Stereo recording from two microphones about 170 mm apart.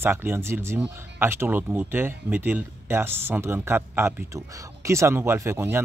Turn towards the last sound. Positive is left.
turn(degrees=-15)  # may be behind; listen again after turning